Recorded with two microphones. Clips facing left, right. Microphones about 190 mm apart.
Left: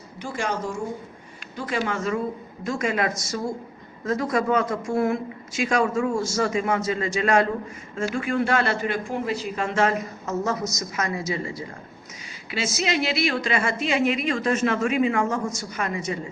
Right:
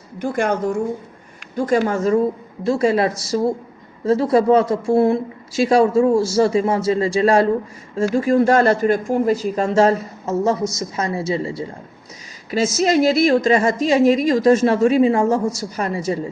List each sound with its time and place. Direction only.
0.2 s speech: 55° right (ahead or behind)
1.5 s a woman's voice: 45° right (ahead or behind)
12.5 s a woman's voice: 45° right (ahead or behind)